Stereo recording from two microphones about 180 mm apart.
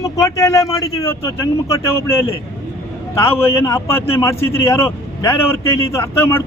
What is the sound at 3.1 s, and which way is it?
A man's voice, 15° left (ahead or behind).